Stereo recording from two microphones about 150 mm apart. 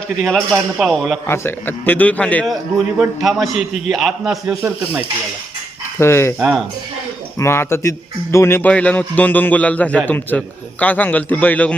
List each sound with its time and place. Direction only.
0.2 s a man's voice: centre (ahead or behind)
1.3 s a man's voice: 15° left (ahead or behind); by 4.5 s centre (ahead or behind)
6.0 s a man's voice: 15° left (ahead or behind)
6.4 s a man's voice: centre (ahead or behind)
7.3 s a man's voice: 15° left (ahead or behind)